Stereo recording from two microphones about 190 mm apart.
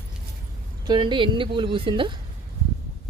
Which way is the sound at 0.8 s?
25° right (ahead or behind).